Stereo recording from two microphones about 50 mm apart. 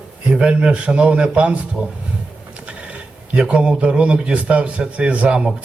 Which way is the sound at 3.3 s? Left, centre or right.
Right.